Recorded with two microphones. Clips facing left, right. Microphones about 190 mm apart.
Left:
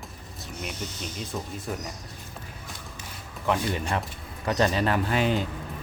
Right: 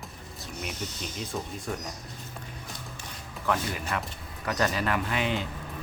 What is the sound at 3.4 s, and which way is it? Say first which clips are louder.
Speech: left 3 dB; 30° left (ahead or behind).